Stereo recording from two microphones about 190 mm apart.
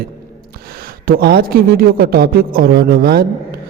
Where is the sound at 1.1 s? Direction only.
55° right (ahead or behind).